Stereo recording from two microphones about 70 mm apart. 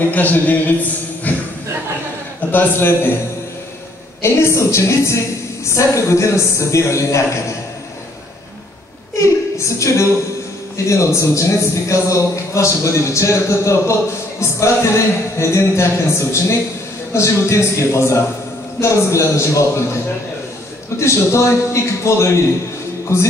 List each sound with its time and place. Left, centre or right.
0.0 s speech: left
1.3 s a sound: left
2.5 s a man's voice: left
4.2 s a man's voice: left
9.2 s a sound: left
10.9 s a man's voice: left
21.0 s a man's voice: left